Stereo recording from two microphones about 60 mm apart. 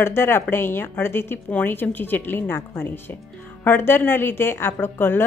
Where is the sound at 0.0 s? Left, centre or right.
Left.